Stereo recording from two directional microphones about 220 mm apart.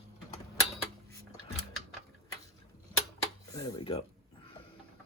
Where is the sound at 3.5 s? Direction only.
15° left (ahead or behind).